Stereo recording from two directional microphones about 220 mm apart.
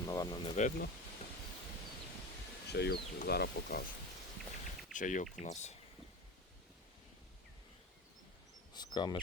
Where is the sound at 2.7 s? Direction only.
50° left (ahead or behind).